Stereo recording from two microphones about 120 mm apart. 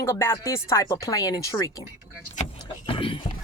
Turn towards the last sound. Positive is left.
turn(degrees=45)  # may be behind; listen again after turning